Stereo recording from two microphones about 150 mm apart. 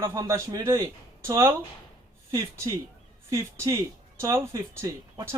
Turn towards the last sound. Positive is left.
turn(degrees=-25)  # may be behind; listen again after turning